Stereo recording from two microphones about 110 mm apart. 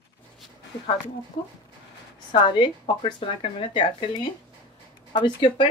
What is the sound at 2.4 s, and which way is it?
Speech, 45° left (ahead or behind).